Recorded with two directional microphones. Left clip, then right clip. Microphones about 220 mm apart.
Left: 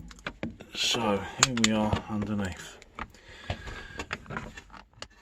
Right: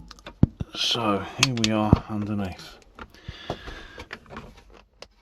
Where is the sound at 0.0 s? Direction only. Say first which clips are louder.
Right 4 dB; 15° right (ahead or behind).